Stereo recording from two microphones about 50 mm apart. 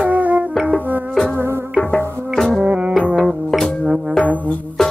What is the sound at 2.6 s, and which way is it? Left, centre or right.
Music, right.